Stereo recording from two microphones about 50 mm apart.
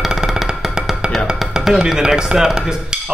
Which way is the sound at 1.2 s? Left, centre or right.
Centre.